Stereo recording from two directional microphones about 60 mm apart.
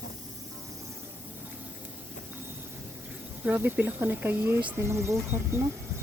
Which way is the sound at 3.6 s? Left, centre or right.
Right.